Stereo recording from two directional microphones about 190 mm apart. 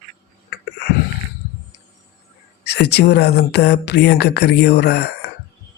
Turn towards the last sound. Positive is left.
turn(degrees=60)  # may be behind; listen again after turning